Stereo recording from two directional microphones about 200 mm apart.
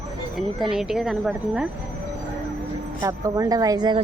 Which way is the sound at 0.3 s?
Centre (ahead or behind).